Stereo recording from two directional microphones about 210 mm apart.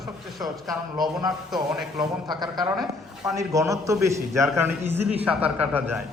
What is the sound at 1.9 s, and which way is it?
A man's voice, 20° right (ahead or behind).